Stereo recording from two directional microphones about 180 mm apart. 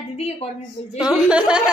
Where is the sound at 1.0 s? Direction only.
5° right (ahead or behind).